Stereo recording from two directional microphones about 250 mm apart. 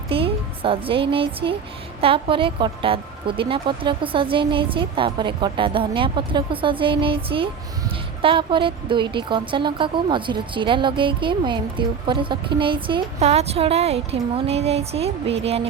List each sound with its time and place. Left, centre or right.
0.1 s speech: right